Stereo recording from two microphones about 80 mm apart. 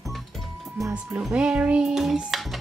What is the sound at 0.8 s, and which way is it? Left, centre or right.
Music, right.